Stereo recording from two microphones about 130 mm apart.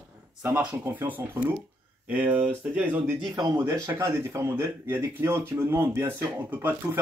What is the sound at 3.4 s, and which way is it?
Speech, 30° right (ahead or behind).